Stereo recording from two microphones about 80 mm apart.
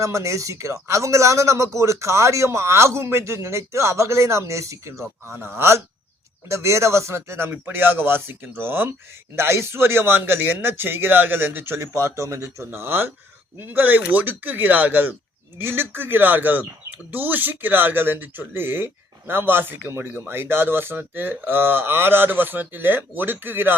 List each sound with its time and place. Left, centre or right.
0.0 s speech: right